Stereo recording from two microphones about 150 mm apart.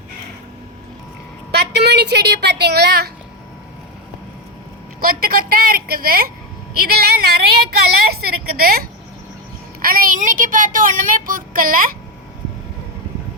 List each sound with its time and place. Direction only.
1.5 s a woman's voice: 90° right
4.9 s a woman's voice: 75° right (ahead or behind)